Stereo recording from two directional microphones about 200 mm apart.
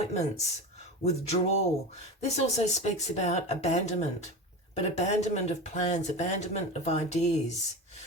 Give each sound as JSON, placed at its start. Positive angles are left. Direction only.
{"t": 0.0, "sound": "speech", "side_deg": 35}